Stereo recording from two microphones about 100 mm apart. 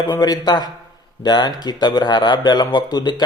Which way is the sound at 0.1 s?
40° left (ahead or behind).